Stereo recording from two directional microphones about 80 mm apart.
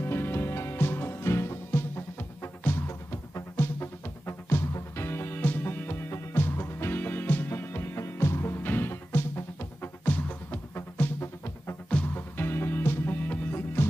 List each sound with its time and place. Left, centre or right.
0.0 s music: left
10.7 s music: left
11.9 s music: left